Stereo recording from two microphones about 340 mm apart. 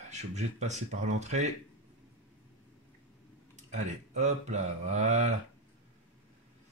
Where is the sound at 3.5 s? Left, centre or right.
Right.